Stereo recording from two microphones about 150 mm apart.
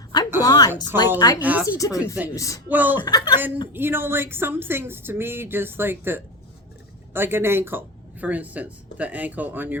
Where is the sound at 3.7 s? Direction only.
15° right (ahead or behind).